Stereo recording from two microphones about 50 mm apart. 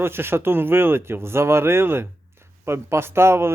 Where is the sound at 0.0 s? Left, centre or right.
Right.